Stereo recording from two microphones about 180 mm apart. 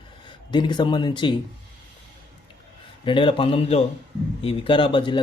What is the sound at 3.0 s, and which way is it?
A man's voice, 30° left (ahead or behind).